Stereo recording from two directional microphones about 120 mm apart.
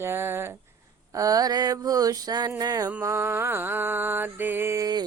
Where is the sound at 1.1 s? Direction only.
30° right (ahead or behind).